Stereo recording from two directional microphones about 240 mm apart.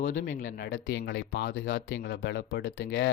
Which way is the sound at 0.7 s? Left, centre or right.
Left.